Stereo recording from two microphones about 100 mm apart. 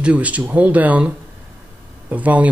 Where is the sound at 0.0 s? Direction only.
15° right (ahead or behind).